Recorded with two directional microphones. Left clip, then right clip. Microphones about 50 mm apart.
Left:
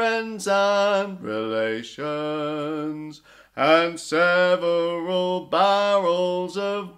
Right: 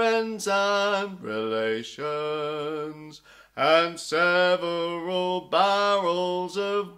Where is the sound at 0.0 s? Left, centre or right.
Left.